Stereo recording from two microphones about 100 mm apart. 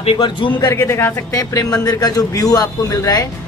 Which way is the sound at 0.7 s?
25° left (ahead or behind).